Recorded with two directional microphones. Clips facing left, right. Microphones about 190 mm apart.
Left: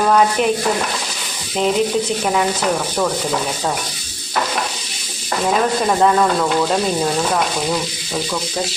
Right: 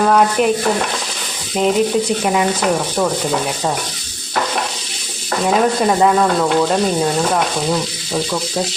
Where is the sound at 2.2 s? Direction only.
5° right (ahead or behind).